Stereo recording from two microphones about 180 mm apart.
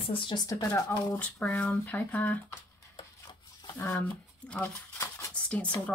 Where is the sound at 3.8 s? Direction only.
10° left (ahead or behind).